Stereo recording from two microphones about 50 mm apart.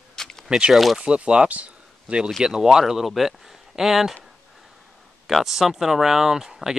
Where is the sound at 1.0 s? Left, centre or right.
Right.